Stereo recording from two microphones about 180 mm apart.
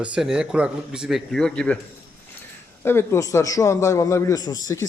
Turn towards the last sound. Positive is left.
turn(degrees=20)  # may be behind; listen again after turning